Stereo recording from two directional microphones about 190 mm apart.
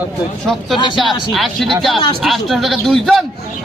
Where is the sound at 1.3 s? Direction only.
Centre (ahead or behind).